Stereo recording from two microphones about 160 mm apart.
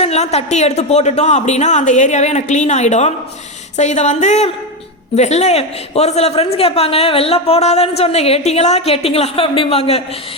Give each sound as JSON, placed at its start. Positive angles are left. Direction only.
{"t": 0.0, "sound": "a man's voice", "side_deg": 40}